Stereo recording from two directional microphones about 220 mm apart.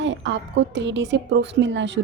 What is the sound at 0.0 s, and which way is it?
A woman's voice, 55° right (ahead or behind).